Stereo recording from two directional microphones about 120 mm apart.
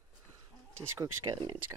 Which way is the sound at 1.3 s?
40° right (ahead or behind).